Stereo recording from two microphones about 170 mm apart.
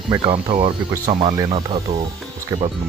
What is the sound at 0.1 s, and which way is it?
Speech, 30° right (ahead or behind).